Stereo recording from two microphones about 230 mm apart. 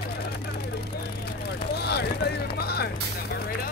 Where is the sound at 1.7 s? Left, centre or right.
Left.